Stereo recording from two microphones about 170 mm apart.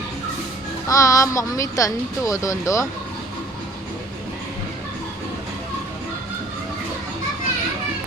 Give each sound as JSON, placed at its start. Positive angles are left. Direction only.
{"t": 0.9, "sound": "speech", "side_deg": 20}